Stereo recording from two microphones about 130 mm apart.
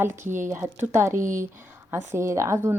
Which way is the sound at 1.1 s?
90° right.